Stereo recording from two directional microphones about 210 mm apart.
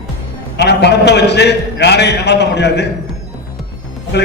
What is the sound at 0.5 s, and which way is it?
A man's voice, 55° left (ahead or behind).